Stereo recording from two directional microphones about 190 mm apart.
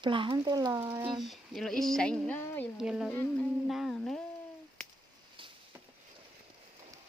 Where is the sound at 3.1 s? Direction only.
10° left (ahead or behind).